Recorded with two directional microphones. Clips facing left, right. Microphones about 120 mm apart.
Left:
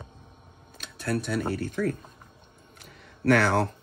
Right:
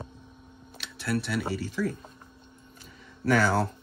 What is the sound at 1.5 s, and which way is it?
Speech, 55° left (ahead or behind).